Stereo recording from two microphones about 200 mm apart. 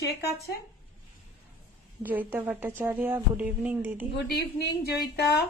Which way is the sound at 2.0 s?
10° right (ahead or behind).